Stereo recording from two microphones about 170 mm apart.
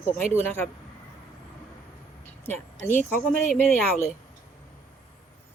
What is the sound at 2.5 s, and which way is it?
Speech, 10° left (ahead or behind).